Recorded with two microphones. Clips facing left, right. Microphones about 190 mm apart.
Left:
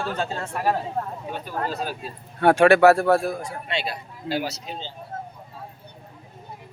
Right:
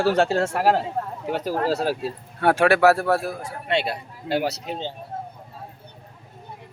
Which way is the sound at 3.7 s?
60° right (ahead or behind).